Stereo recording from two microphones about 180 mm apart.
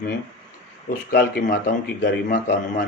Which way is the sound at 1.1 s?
55° left (ahead or behind).